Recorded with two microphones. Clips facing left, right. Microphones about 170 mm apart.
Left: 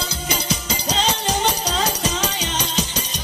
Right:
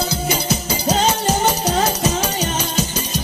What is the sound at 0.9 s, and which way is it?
Music, 50° right (ahead or behind).